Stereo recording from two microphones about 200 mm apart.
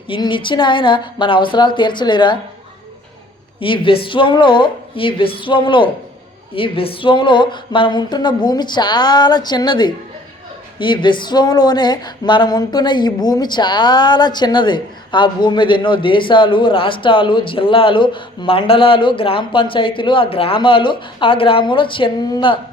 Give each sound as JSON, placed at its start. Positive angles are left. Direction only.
{"t": 0.1, "sound": "speech", "side_deg": 25}
{"t": 3.6, "sound": "speech", "side_deg": 25}